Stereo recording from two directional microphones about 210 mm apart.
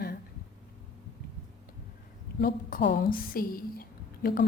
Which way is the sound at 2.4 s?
40° left (ahead or behind).